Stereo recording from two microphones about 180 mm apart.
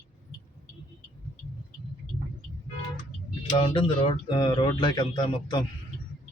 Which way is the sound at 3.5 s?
30° left (ahead or behind).